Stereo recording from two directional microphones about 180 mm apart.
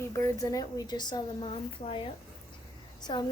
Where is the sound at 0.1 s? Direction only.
20° left (ahead or behind).